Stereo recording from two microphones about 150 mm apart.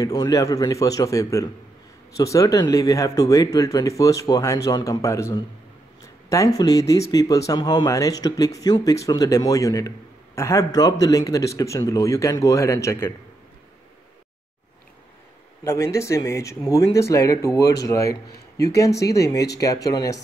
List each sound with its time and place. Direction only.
0.0 s a man's voice: 25° left (ahead or behind)
15.6 s a man's voice: 20° left (ahead or behind)